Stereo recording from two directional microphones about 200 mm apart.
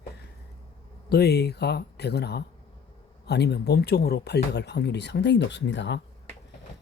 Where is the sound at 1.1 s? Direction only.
55° left (ahead or behind).